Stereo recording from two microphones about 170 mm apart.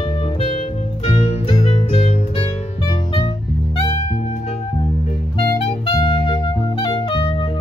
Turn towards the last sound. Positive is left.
turn(degrees=25)  # may be behind; listen again after turning